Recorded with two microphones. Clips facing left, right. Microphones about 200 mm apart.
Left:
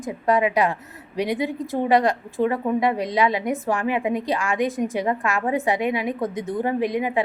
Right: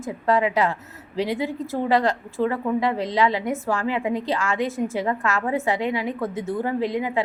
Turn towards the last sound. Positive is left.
turn(degrees=15)  # may be behind; listen again after turning